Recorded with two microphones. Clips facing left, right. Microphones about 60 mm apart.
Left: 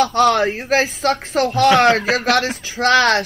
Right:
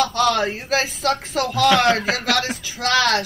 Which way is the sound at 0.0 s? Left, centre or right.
Left.